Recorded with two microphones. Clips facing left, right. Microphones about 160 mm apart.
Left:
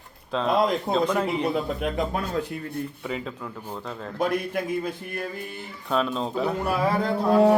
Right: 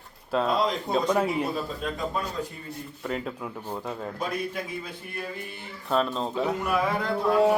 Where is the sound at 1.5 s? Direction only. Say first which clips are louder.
Left 5 dB; 60° left (ahead or behind).